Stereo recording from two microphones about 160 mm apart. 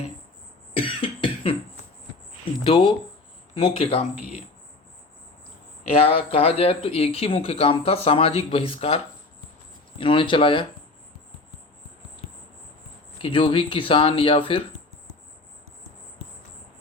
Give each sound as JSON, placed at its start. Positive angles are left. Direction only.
{"t": 0.8, "sound": "cough", "side_deg": 35}
{"t": 2.4, "sound": "a sound", "side_deg": 30}
{"t": 3.5, "sound": "speech", "side_deg": 35}
{"t": 5.9, "sound": "speech", "side_deg": 35}
{"t": 10.0, "sound": "speech", "side_deg": 30}
{"t": 13.2, "sound": "speech", "side_deg": 35}